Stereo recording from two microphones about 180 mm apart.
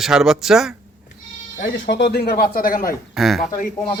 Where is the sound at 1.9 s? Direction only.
70° left (ahead or behind); by 2.9 s 50° left (ahead or behind).